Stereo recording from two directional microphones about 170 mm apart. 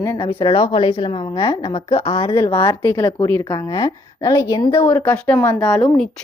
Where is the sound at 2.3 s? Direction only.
15° left (ahead or behind).